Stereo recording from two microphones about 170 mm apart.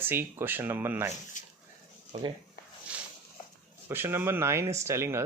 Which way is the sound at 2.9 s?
5° right (ahead or behind).